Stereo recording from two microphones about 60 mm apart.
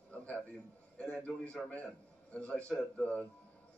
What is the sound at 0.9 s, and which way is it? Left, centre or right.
Speech, centre.